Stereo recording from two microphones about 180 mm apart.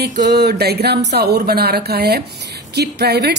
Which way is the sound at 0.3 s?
65° right (ahead or behind).